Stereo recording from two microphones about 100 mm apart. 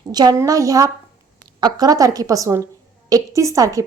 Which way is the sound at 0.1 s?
40° right (ahead or behind).